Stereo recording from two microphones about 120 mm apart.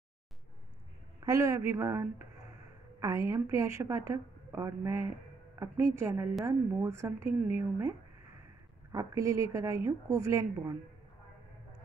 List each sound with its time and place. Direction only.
1.2 s a woman's voice: 30° right (ahead or behind)
8.9 s a woman's voice: 25° right (ahead or behind)